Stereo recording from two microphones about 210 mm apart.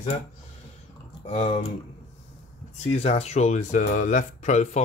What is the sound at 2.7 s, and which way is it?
Speech, 30° left (ahead or behind).